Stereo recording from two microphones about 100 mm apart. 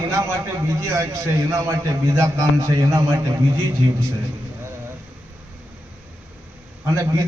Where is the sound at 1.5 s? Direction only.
30° right (ahead or behind).